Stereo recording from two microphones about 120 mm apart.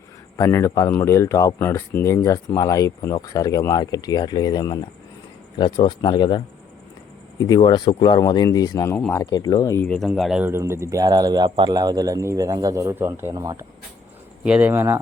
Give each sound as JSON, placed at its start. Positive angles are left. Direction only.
{"t": 0.3, "sound": "speech", "side_deg": 25}
{"t": 9.8, "sound": "speech", "side_deg": 10}
{"t": 10.1, "sound": "speech", "side_deg": -5}
{"t": 10.4, "sound": "speech", "side_deg": -20}
{"t": 14.4, "sound": "speech", "side_deg": -10}